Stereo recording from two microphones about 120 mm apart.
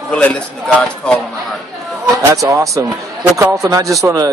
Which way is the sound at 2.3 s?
25° right (ahead or behind).